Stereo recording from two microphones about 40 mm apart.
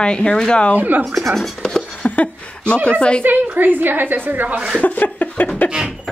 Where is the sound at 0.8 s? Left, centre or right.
Right.